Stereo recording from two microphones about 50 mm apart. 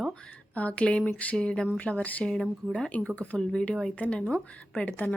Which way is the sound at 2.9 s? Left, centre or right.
Left.